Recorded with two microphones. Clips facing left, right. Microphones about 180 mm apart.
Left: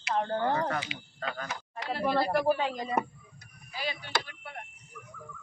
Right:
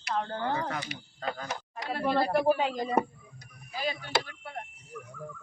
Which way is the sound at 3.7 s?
40° right (ahead or behind).